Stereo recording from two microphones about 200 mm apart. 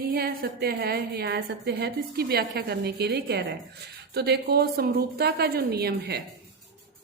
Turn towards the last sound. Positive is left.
turn(degrees=-55)  # may be behind; listen again after turning